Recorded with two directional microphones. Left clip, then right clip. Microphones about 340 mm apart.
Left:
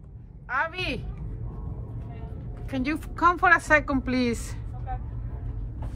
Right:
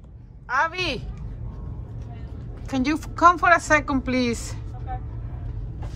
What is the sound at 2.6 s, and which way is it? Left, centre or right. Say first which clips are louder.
A woman's voice: right 5 dB; centre.